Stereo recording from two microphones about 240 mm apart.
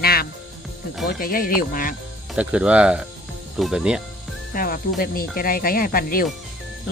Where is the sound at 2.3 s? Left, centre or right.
Centre.